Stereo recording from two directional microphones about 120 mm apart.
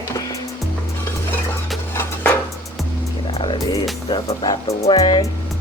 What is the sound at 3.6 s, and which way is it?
Speech, 30° left (ahead or behind).